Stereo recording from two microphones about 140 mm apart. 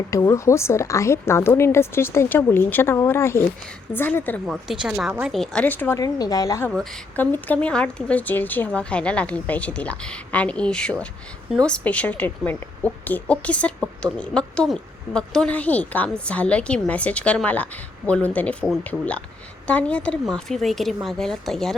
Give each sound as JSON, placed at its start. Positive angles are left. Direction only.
{"t": 0.1, "sound": "a woman's voice", "side_deg": 20}
{"t": 4.4, "sound": "speech", "side_deg": -5}
{"t": 6.0, "sound": "a woman's voice", "side_deg": 25}
{"t": 6.7, "sound": "a woman's voice", "side_deg": 5}